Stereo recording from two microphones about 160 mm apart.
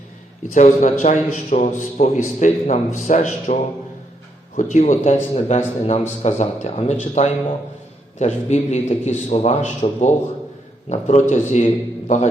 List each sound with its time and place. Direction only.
0.5 s a man's voice: 50° left (ahead or behind)